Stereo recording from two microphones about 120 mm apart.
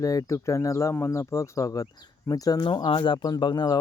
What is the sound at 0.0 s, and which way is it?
Speech, 25° left (ahead or behind).